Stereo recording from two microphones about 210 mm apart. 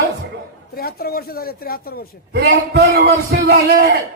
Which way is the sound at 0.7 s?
45° left (ahead or behind).